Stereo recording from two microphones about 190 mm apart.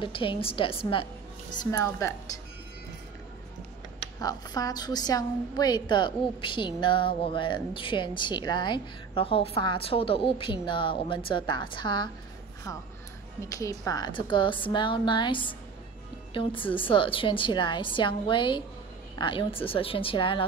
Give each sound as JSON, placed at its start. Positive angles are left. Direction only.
{"t": 0.0, "sound": "a woman's voice", "side_deg": 25}
{"t": 4.2, "sound": "a woman's voice", "side_deg": 20}
{"t": 13.5, "sound": "a woman's voice", "side_deg": 15}